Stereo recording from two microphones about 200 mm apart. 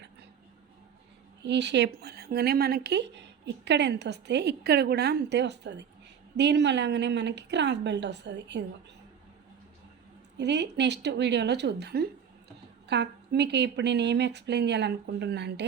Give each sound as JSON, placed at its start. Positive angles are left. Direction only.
{"t": 1.5, "sound": "speech", "side_deg": -60}
{"t": 10.3, "sound": "speech", "side_deg": -60}